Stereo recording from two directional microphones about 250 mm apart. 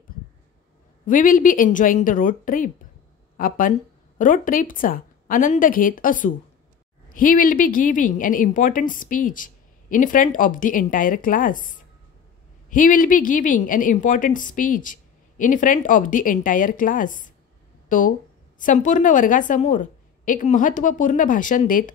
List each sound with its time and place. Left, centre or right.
1.0 s speech: left